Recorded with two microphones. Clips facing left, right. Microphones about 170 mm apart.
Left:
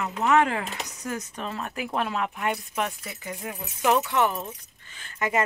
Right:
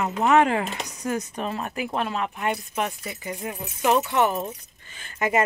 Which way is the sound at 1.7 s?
Centre (ahead or behind).